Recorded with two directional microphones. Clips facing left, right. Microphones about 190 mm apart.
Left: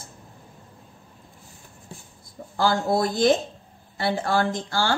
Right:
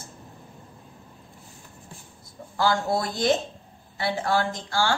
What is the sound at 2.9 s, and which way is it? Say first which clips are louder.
A woman's voice: left 4 dB; 50° left (ahead or behind).